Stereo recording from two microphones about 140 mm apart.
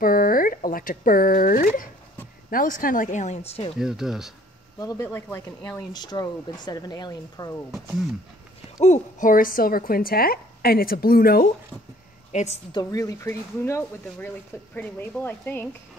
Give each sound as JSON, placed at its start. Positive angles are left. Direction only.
{"t": 0.0, "sound": "a sound", "side_deg": 90}
{"t": 2.5, "sound": "speech", "side_deg": 75}
{"t": 3.7, "sound": "speech", "side_deg": -5}
{"t": 4.7, "sound": "speech", "side_deg": 25}
{"t": 8.8, "sound": "a woman's voice", "side_deg": 65}
{"t": 12.3, "sound": "a woman's voice", "side_deg": 55}
{"t": 12.7, "sound": "speech", "side_deg": 25}